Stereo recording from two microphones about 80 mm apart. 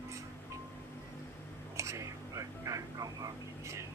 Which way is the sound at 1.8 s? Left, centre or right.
Right.